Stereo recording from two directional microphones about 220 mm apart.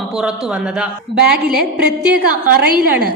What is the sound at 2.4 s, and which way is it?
Speech, 45° right (ahead or behind).